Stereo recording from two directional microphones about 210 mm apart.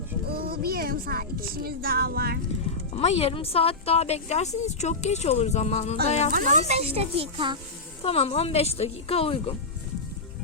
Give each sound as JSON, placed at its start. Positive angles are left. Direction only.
{"t": 0.3, "sound": "speech", "side_deg": -45}
{"t": 2.9, "sound": "speech", "side_deg": 30}
{"t": 6.3, "sound": "speech", "side_deg": -35}
{"t": 8.0, "sound": "speech", "side_deg": 30}